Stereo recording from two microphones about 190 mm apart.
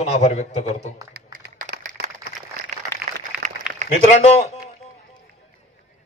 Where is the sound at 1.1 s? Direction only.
50° right (ahead or behind).